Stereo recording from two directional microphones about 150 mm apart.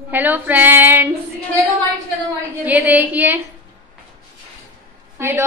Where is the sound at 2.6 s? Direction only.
10° right (ahead or behind).